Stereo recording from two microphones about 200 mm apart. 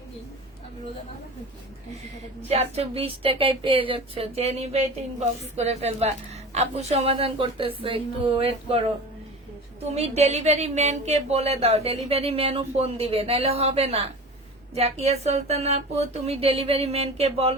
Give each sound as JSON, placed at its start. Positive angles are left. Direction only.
{"t": 2.5, "sound": "speech", "side_deg": -30}
{"t": 9.8, "sound": "a woman's voice", "side_deg": -30}